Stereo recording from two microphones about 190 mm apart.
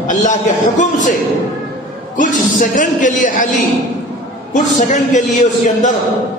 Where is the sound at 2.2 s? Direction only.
45° left (ahead or behind).